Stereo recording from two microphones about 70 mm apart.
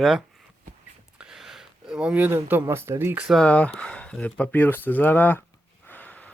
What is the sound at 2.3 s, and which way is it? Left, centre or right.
Speech, right.